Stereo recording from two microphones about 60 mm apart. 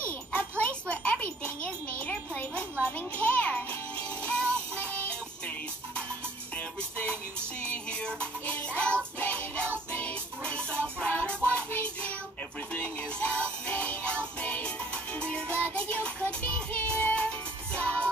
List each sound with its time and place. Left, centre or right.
0.3 s jingle: left
0.8 s wind chime: left
3.2 s music: left
6.5 s music: left
11.7 s child singing: left
12.7 s music: left